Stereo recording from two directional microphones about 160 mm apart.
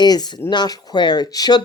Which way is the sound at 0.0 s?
25° left (ahead or behind).